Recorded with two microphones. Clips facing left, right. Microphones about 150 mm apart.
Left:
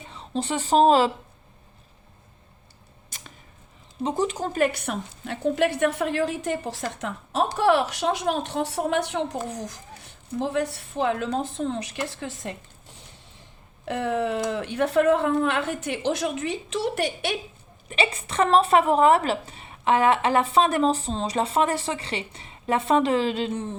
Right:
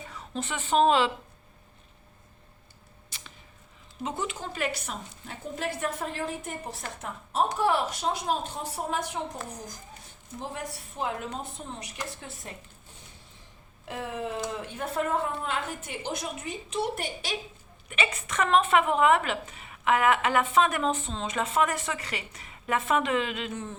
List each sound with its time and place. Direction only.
0.1 s a woman's voice: 30° left (ahead or behind)
3.1 s a sound: 45° left (ahead or behind)
4.0 s a woman's voice: 35° left (ahead or behind); by 6.8 s 90° left
7.5 s a woman's voice: 75° left (ahead or behind)
9.5 s a woman's voice: 85° left
13.8 s a woman's voice: 75° left (ahead or behind)
17.8 s a woman's voice: 30° left (ahead or behind)